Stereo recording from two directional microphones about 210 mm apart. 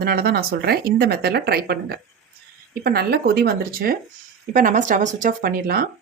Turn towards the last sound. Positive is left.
turn(degrees=-45)  # may be behind; listen again after turning